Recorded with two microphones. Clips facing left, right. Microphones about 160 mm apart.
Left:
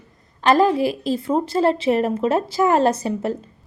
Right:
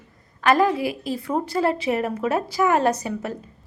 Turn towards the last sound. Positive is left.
turn(degrees=30)  # may be behind; listen again after turning